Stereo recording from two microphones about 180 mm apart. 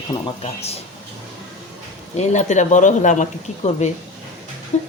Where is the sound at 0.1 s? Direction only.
35° left (ahead or behind).